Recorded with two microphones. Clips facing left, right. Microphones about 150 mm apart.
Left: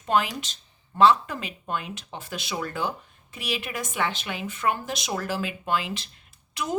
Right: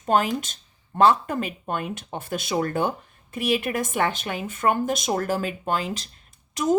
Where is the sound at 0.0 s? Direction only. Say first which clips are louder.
Right 3 dB; 45° right (ahead or behind).